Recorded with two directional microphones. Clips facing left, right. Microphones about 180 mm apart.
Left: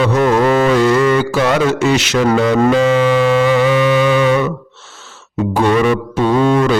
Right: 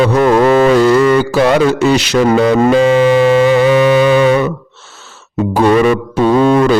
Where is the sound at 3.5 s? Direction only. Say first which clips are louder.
Right 3 dB; 40° right (ahead or behind).